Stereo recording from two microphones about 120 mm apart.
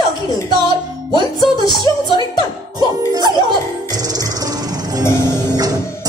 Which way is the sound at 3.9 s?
30° right (ahead or behind).